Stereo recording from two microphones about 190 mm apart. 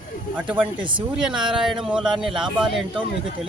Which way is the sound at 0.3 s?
10° right (ahead or behind).